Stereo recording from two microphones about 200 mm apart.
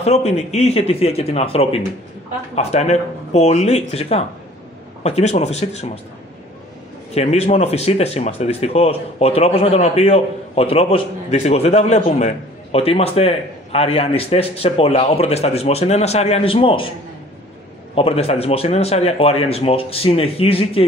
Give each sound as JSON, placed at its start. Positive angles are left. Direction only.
{"t": 0.0, "sound": "speech", "side_deg": 30}
{"t": 7.2, "sound": "speech", "side_deg": 30}
{"t": 17.9, "sound": "speech", "side_deg": 30}